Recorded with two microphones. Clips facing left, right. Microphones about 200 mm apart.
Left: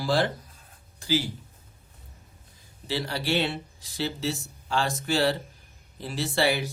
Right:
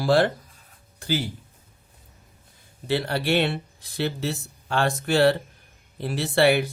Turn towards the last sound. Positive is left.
turn(degrees=-60)  # may be behind; listen again after turning